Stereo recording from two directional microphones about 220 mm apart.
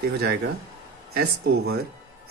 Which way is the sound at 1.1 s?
45° right (ahead or behind).